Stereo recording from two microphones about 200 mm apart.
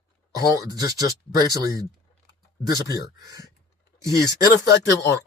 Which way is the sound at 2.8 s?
15° right (ahead or behind).